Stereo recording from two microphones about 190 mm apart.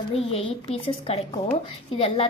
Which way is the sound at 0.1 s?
30° left (ahead or behind).